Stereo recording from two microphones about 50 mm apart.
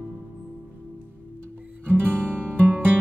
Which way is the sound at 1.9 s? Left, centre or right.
Left.